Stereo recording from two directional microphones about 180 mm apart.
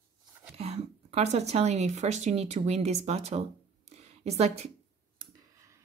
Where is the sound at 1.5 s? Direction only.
40° right (ahead or behind).